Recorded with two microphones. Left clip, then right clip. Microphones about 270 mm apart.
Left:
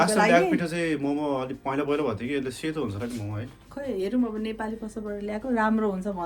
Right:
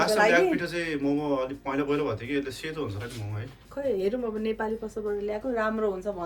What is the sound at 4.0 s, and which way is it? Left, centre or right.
A woman's voice, left.